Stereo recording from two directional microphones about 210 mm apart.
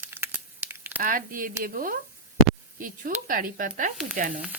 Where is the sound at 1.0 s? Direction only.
40° right (ahead or behind).